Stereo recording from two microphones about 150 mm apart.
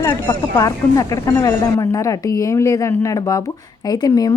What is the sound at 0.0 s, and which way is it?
Speech, 25° left (ahead or behind).